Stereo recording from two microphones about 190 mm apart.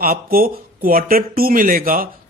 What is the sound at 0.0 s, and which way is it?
Speech, 50° right (ahead or behind).